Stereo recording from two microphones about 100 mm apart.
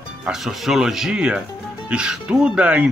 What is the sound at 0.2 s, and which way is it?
Speech, 5° right (ahead or behind).